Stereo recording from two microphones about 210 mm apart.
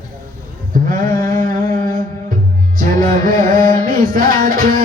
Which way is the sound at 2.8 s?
40° right (ahead or behind).